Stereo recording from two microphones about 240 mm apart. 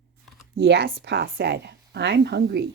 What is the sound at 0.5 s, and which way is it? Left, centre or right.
A woman's voice, right.